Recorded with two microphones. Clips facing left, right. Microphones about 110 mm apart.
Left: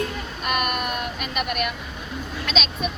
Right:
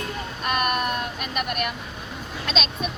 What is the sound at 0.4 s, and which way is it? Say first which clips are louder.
Speech: right 1 dB; 35° right (ahead or behind).